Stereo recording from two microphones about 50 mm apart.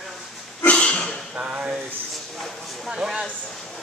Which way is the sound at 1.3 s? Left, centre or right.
Right.